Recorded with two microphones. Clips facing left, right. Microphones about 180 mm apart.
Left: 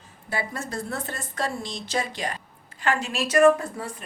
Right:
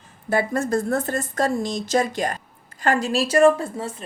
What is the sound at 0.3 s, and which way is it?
A woman's voice, 50° right (ahead or behind).